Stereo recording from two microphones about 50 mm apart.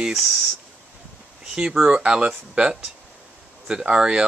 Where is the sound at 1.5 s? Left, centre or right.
Centre.